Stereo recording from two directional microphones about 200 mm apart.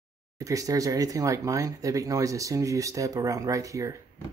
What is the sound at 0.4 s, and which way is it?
Speech, 15° right (ahead or behind).